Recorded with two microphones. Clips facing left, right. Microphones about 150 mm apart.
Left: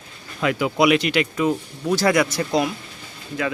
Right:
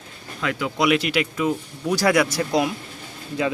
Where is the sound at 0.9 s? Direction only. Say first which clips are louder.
Left 2 dB; 5° right (ahead or behind).